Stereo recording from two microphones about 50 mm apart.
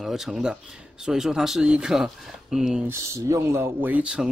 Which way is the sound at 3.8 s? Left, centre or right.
Right.